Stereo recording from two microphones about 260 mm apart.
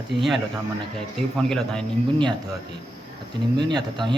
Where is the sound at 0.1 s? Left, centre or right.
Right.